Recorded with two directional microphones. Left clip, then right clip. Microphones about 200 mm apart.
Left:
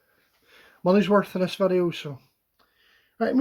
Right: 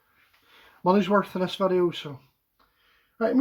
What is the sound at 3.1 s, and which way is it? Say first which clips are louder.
Speech: even; 40° left (ahead or behind).